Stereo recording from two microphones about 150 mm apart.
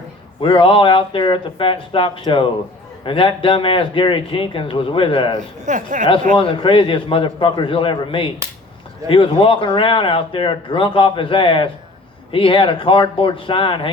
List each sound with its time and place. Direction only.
0.4 s speech: 35° left (ahead or behind)
5.6 s speech: 60° right (ahead or behind)
6.3 s speech: 35° left (ahead or behind)